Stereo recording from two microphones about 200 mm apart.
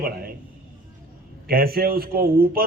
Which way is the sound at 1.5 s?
50° right (ahead or behind).